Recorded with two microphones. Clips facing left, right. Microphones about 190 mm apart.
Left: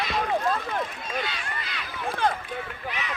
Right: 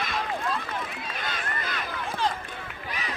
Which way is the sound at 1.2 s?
45° right (ahead or behind).